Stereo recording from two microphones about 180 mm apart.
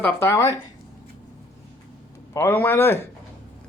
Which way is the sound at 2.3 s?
10° left (ahead or behind).